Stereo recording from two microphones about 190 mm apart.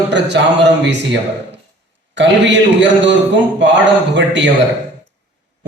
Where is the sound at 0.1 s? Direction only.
65° right (ahead or behind).